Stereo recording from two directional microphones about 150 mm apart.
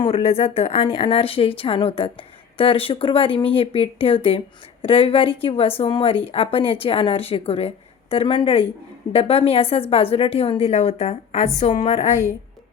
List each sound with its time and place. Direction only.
0.0 s speech: 40° left (ahead or behind)